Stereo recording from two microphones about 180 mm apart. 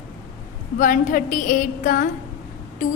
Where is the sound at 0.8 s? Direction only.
50° left (ahead or behind).